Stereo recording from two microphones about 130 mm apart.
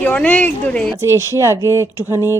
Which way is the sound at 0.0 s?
10° left (ahead or behind).